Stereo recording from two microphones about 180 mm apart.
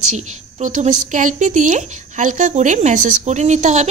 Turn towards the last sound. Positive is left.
turn(degrees=-40)  # may be behind; listen again after turning